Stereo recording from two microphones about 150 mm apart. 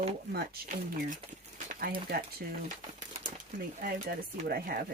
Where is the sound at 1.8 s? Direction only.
85° right.